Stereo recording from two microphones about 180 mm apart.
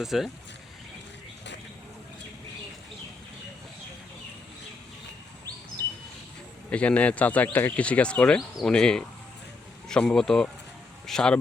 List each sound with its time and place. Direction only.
0.0 s speech: centre (ahead or behind)
5.8 s bird: 20° right (ahead or behind)
6.7 s speech: 5° left (ahead or behind)